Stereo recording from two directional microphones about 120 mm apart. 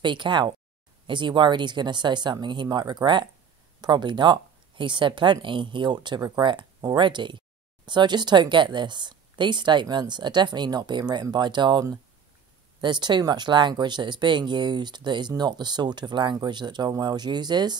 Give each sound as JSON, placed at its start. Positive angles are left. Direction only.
{"t": 0.0, "sound": "a woman's voice", "side_deg": -40}
{"t": 12.8, "sound": "a woman's voice", "side_deg": -40}